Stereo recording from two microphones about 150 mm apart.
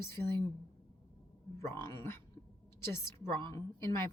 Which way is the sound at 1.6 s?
15° left (ahead or behind).